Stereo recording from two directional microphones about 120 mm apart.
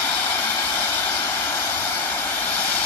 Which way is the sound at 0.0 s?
15° left (ahead or behind).